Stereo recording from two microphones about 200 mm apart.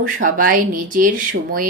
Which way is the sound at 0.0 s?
45° right (ahead or behind).